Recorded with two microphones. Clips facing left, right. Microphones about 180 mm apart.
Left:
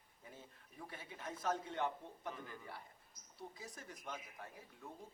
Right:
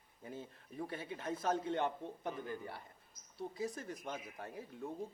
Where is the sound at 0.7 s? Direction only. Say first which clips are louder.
Right 9 dB; 35° right (ahead or behind).